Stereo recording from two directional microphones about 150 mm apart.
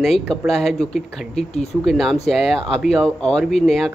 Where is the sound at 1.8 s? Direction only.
Centre (ahead or behind).